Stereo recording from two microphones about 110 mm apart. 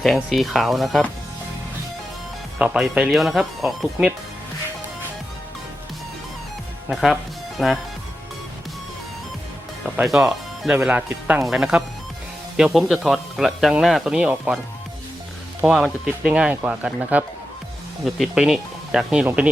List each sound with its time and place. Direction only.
0.0 s speech: centre (ahead or behind)
2.6 s speech: 10° right (ahead or behind)
6.9 s speech: 5° right (ahead or behind)
9.8 s speech: 10° right (ahead or behind)
11.4 s speech: 5° right (ahead or behind)
15.6 s speech: 5° right (ahead or behind)